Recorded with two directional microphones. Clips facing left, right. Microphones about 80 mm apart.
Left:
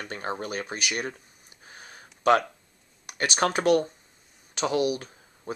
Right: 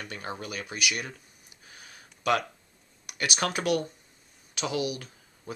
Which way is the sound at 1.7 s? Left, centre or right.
Left.